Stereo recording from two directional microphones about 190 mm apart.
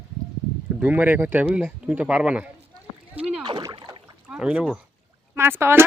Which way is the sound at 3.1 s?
5° right (ahead or behind).